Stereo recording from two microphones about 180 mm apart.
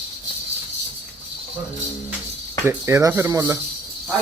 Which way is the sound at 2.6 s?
15° right (ahead or behind).